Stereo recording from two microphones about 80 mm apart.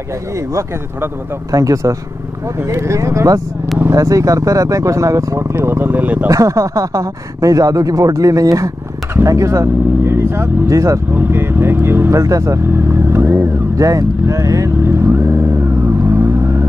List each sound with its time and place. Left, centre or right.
1.5 s speech: right
6.2 s speech: right
11.1 s speech: right
12.1 s speech: right
12.7 s speech: right
13.7 s speech: right
14.9 s vehicle: right